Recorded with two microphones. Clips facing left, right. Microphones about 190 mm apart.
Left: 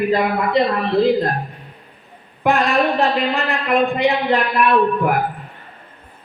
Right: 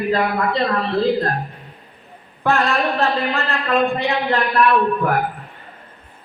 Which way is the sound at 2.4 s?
15° left (ahead or behind).